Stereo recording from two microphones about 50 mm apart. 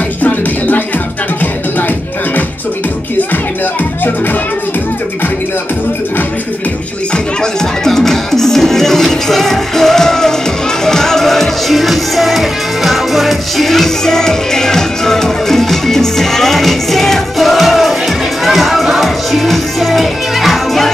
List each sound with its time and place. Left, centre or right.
0.2 s music: left
7.8 s music: centre